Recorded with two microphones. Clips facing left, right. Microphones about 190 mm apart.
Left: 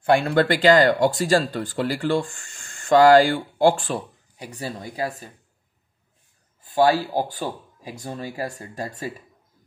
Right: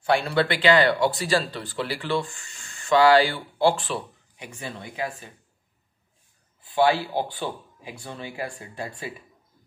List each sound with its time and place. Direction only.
0.0 s speech: 50° left (ahead or behind)
6.6 s speech: 40° left (ahead or behind)